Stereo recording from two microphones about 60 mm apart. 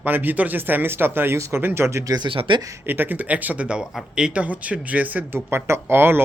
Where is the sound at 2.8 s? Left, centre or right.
Right.